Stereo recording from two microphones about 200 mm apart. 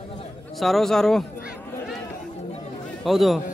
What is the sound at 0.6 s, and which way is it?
Speech, centre (ahead or behind).